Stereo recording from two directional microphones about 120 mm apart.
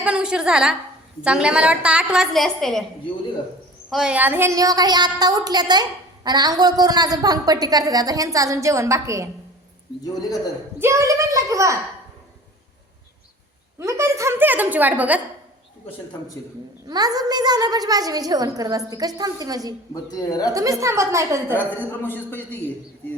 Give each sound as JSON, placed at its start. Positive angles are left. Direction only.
{"t": 0.0, "sound": "a woman's voice", "side_deg": -10}
{"t": 3.8, "sound": "a woman's voice", "side_deg": 0}
{"t": 4.1, "sound": "a woman's voice", "side_deg": -15}
{"t": 4.5, "sound": "a woman's voice", "side_deg": -30}
{"t": 10.8, "sound": "a child's voice", "side_deg": -25}
{"t": 13.7, "sound": "a woman's voice", "side_deg": -25}
{"t": 16.9, "sound": "a woman's voice", "side_deg": -30}
{"t": 19.9, "sound": "speech", "side_deg": 30}
{"t": 20.5, "sound": "a child's voice", "side_deg": -30}
{"t": 21.5, "sound": "a woman's voice", "side_deg": 15}